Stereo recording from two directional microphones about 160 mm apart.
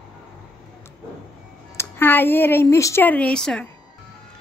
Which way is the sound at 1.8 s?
15° left (ahead or behind).